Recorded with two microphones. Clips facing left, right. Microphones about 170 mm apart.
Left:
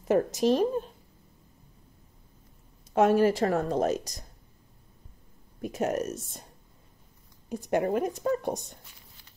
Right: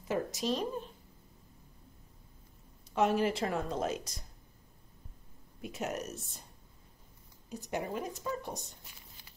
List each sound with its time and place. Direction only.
0.1 s a woman's voice: 50° left (ahead or behind)
2.9 s a woman's voice: 50° left (ahead or behind)
5.6 s a woman's voice: 45° left (ahead or behind)
7.4 s speech: 55° left (ahead or behind)